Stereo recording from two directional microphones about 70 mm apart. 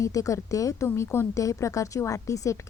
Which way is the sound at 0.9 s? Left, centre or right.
Left.